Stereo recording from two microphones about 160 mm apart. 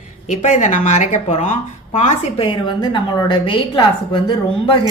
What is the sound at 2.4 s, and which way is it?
A woman's voice, 30° left (ahead or behind).